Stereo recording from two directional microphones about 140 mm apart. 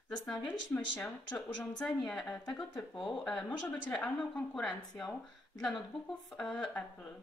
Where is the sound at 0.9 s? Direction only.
15° left (ahead or behind).